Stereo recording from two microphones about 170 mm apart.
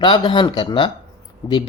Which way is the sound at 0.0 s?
30° left (ahead or behind).